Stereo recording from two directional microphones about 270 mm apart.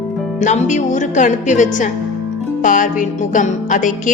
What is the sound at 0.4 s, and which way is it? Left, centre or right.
Speech, left.